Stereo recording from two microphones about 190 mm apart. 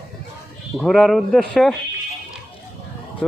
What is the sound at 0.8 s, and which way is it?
Speech, 5° left (ahead or behind).